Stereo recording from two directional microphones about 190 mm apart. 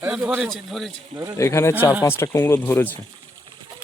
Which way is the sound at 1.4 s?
15° left (ahead or behind).